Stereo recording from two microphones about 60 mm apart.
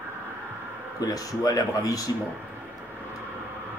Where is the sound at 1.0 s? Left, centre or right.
Left.